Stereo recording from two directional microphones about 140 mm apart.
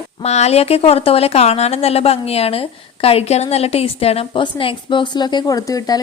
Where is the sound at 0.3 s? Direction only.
50° left (ahead or behind).